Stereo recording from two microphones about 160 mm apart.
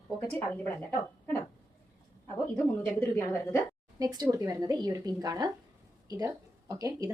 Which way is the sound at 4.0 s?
25° right (ahead or behind).